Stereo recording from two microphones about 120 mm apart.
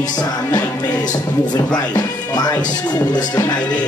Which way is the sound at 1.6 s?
10° left (ahead or behind).